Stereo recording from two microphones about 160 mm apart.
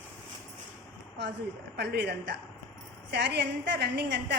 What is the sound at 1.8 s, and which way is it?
A woman's voice, 90° right.